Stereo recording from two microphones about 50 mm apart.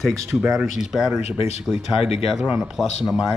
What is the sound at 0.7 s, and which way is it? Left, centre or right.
Speech, centre.